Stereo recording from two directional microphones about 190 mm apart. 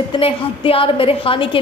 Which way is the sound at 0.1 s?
30° left (ahead or behind).